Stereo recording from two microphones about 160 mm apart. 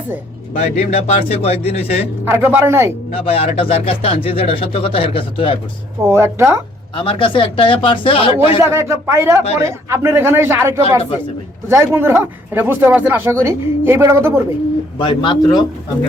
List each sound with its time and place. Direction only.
0.8 s speech: 40° left (ahead or behind)
2.2 s speech: 15° right (ahead or behind)
3.1 s speech: 40° left (ahead or behind)
6.0 s speech: 15° right (ahead or behind)
6.9 s speech: 35° left (ahead or behind)
8.6 s speech: 15° right (ahead or behind)
14.9 s a man's voice: 30° left (ahead or behind)